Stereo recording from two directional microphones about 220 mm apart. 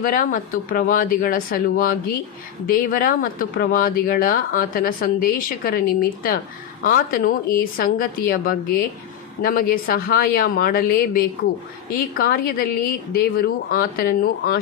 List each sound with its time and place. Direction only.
0.0 s speech: 40° left (ahead or behind)